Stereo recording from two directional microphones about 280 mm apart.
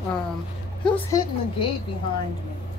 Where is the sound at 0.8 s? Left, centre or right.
Centre.